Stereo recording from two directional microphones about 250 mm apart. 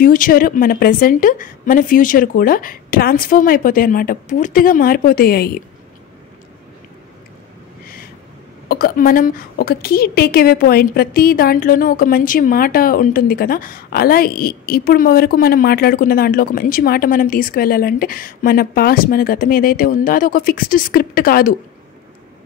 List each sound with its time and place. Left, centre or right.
0.0 s a woman's voice: left
8.6 s a woman's voice: left